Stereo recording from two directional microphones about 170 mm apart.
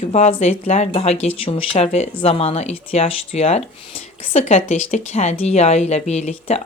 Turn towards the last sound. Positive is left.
turn(degrees=40)  # may be behind; listen again after turning